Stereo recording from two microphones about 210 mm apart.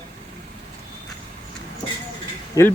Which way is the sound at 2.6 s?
15° left (ahead or behind).